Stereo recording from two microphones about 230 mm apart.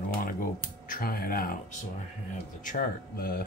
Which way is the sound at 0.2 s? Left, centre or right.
Left.